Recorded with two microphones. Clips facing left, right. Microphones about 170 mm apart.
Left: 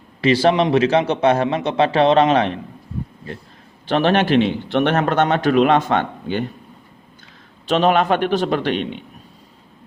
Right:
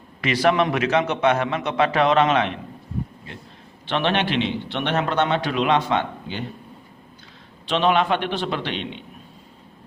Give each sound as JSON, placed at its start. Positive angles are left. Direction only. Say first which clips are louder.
{"t": 0.2, "sound": "a man's voice", "louder": "left 4 dB", "side_deg": 30}
{"t": 3.8, "sound": "a man's voice", "louder": "left 6 dB", "side_deg": 40}
{"t": 7.7, "sound": "a man's voice", "louder": "left 4 dB", "side_deg": 45}